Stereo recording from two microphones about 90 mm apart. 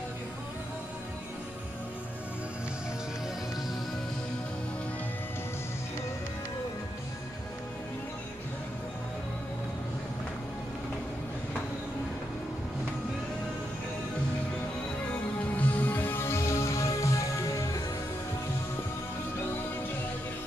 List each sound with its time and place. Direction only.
15.5 s music: 20° left (ahead or behind); by 17.6 s 35° left (ahead or behind)